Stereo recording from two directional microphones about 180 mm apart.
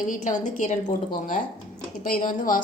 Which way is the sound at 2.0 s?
50° left (ahead or behind).